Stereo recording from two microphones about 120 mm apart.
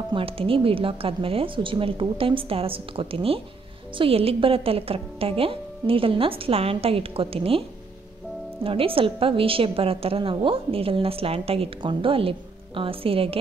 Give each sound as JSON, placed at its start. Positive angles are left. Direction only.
{"t": 0.1, "sound": "a woman's voice", "side_deg": -50}
{"t": 8.6, "sound": "a woman's voice", "side_deg": -50}